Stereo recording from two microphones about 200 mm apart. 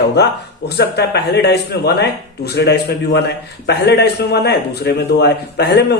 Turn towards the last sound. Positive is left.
turn(degrees=55)  # may be behind; listen again after turning